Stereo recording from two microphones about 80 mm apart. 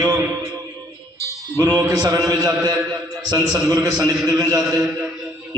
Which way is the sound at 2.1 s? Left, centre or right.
Right.